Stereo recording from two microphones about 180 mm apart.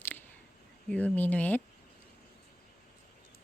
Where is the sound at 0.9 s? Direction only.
10° left (ahead or behind).